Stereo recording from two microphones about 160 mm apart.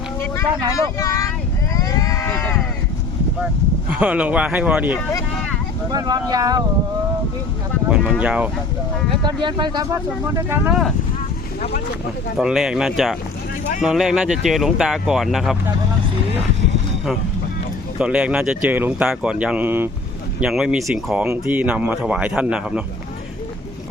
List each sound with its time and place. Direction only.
0.9 s vehicle: 20° left (ahead or behind)
1.7 s sheep: 20° left (ahead or behind)
3.8 s speech: 5° right (ahead or behind)
5.9 s speech: 25° right (ahead or behind)
7.9 s speech: 5° right (ahead or behind)
9.2 s speech: 30° right (ahead or behind)
10.3 s speech: 15° right (ahead or behind)
12.4 s speech: 5° right (ahead or behind)
18.0 s speech: 5° right (ahead or behind)